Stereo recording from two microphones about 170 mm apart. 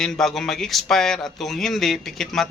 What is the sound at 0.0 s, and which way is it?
Speech, centre (ahead or behind).